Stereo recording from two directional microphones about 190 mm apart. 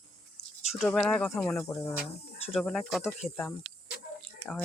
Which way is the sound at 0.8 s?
Centre (ahead or behind).